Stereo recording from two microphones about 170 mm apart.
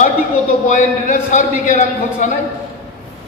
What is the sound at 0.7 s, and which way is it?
A man's voice, 50° left (ahead or behind).